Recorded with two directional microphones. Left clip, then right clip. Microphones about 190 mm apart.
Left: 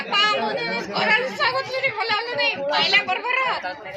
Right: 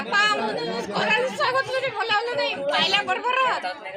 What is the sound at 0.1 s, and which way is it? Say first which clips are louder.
Chatter: left 1 dB; 60° right (ahead or behind).